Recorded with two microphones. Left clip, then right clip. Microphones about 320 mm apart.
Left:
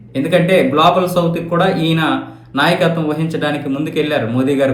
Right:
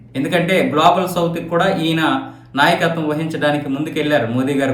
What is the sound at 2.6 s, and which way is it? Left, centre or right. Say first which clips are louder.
Speech: left 1 dB; centre.